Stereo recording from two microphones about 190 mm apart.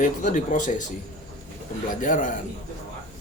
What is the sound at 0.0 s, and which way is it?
Speech, 40° left (ahead or behind).